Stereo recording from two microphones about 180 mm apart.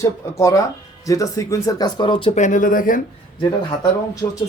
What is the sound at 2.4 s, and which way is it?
Speech, 45° left (ahead or behind).